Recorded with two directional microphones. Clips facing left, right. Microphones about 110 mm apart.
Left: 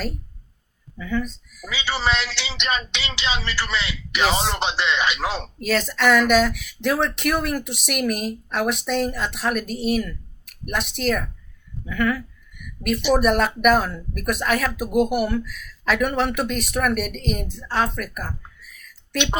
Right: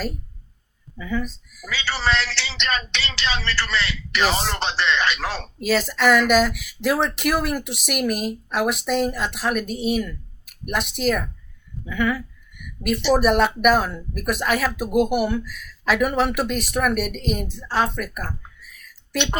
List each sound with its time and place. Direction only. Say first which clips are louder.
0.9 s speech: left 1 dB; 5° right (ahead or behind)
1.7 s a man's voice: even; 15° left (ahead or behind)
4.3 s speech: left 1 dB; centre (ahead or behind)
4.5 s a man's voice: even; 15° left (ahead or behind)
5.5 s speech: right 3 dB; centre (ahead or behind)
11.9 s a sound: even; centre (ahead or behind)
13.1 s speech: right 2 dB; centre (ahead or behind)